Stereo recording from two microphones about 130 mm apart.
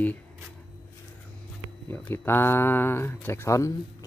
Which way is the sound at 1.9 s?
15° left (ahead or behind).